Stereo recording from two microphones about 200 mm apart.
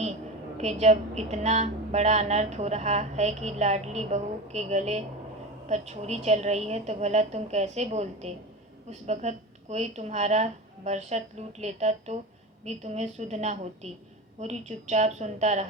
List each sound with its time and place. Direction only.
0.5 s a woman's voice: 35° right (ahead or behind)